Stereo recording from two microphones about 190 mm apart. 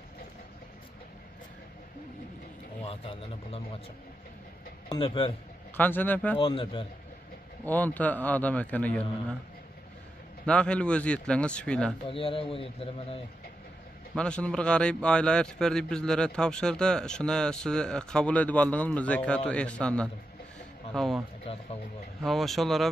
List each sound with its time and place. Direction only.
2.8 s a man's voice: 30° left (ahead or behind)
4.8 s speech: 25° left (ahead or behind)
5.8 s speech: 10° left (ahead or behind)
6.3 s a man's voice: 25° left (ahead or behind)
7.6 s speech: 10° left (ahead or behind)
10.4 s a man's voice: 5° left (ahead or behind)
12.1 s a man's voice: 30° left (ahead or behind)
14.1 s a man's voice: 5° left (ahead or behind)
21.5 s a man's voice: 30° left (ahead or behind)
22.2 s a man's voice: centre (ahead or behind)